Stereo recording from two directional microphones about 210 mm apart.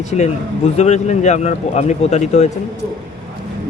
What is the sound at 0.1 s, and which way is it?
Speech, 35° left (ahead or behind).